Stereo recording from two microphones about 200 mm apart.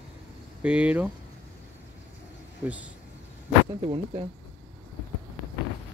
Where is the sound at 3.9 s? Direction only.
30° right (ahead or behind).